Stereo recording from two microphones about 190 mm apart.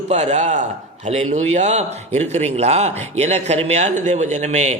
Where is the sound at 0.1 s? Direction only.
35° right (ahead or behind).